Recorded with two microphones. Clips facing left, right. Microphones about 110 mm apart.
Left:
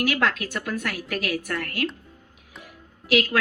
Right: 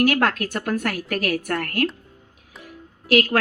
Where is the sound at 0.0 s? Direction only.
50° right (ahead or behind).